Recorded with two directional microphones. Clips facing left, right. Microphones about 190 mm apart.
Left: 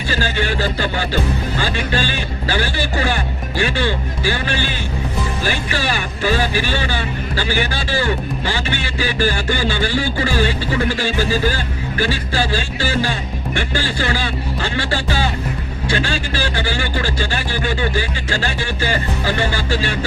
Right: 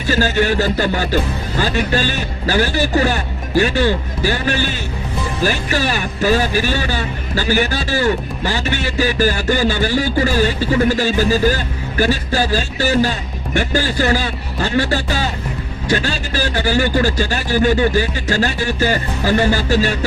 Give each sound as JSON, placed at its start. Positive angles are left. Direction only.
{"t": 0.1, "sound": "speech", "side_deg": -45}